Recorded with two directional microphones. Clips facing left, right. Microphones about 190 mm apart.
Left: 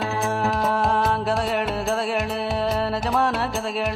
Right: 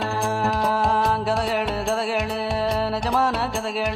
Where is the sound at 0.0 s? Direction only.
Centre (ahead or behind).